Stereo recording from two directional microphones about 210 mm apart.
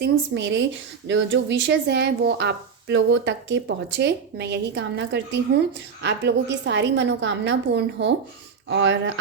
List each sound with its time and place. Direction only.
0.0 s a woman's voice: 55° right (ahead or behind)